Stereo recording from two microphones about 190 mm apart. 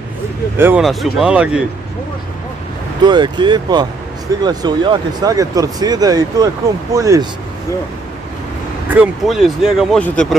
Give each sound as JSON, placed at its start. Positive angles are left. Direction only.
{"t": 0.6, "sound": "speech", "side_deg": -10}
{"t": 3.1, "sound": "speech", "side_deg": -25}
{"t": 8.8, "sound": "speech", "side_deg": -5}